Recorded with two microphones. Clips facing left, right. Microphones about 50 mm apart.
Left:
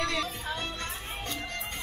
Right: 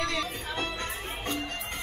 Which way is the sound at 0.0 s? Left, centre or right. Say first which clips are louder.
Even; centre.